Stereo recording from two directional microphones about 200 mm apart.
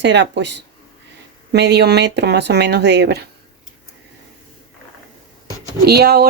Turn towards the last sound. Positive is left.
turn(degrees=-50)  # may be behind; listen again after turning